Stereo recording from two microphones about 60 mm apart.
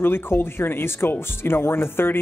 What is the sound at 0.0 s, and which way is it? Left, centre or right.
Speech, left.